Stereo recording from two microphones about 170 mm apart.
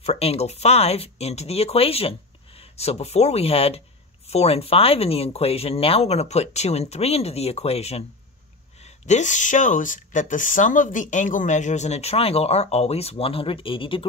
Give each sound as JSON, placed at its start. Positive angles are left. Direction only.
{"t": 0.0, "sound": "speech", "side_deg": 35}